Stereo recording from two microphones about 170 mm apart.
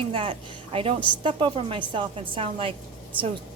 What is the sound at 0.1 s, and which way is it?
A woman's voice, 30° right (ahead or behind).